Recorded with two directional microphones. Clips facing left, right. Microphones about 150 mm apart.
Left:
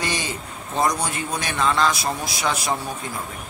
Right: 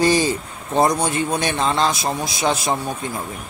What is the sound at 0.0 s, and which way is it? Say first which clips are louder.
A man's voice: right 10 dB; 35° right (ahead or behind).